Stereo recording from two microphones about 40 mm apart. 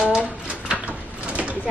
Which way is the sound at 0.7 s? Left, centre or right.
Right.